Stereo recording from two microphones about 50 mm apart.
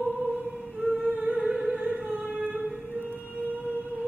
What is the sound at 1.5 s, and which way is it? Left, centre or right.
Music, centre.